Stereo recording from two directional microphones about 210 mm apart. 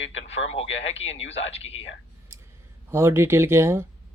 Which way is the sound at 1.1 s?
65° left (ahead or behind).